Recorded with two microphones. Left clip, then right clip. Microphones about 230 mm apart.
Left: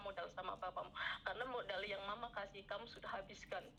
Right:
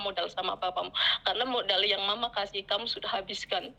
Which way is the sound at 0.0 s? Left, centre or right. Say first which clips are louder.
Right 15 dB; right.